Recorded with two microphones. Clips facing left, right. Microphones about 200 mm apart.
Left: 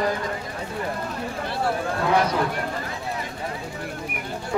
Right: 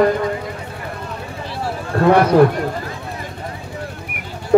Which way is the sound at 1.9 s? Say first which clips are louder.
Right 12 dB; 60° right (ahead or behind).